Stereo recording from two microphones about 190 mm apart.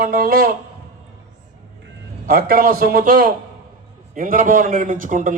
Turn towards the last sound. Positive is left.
turn(degrees=-45)  # may be behind; listen again after turning